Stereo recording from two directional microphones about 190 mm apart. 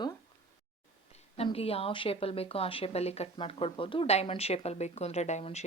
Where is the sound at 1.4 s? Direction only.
30° left (ahead or behind).